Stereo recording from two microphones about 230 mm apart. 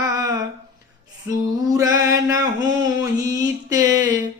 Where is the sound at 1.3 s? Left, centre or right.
Centre.